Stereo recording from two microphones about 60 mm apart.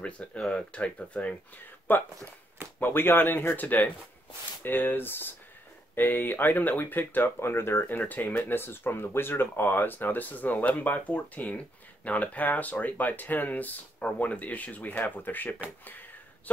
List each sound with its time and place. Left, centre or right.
0.0 s speech: centre
1.9 s speech: left